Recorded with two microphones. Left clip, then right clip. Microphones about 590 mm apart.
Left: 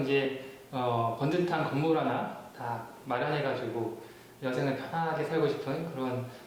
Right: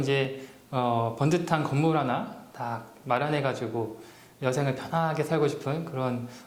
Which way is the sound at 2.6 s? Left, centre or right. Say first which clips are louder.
Right 3 dB; right.